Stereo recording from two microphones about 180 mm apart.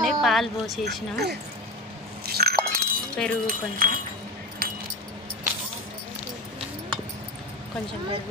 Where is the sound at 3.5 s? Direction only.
50° right (ahead or behind).